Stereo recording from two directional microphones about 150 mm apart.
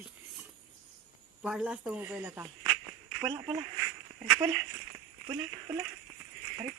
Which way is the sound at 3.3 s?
25° right (ahead or behind).